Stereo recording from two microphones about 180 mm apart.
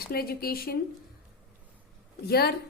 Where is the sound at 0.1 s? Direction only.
55° left (ahead or behind).